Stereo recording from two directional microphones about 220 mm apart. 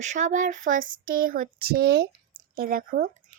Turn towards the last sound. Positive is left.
turn(degrees=-40)  # may be behind; listen again after turning